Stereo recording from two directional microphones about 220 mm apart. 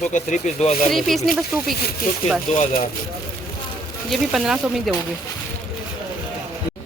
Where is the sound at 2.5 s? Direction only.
35° left (ahead or behind).